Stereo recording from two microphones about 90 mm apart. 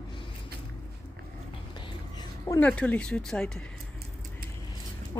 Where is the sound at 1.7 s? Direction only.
55° left (ahead or behind).